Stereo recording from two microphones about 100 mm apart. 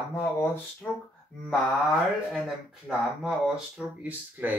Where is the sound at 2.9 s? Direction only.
5° right (ahead or behind).